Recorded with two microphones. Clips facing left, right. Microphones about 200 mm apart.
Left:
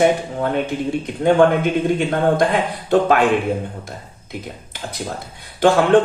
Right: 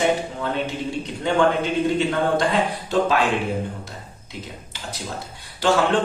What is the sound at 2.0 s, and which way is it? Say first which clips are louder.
Speech: left 4 dB; 55° left (ahead or behind).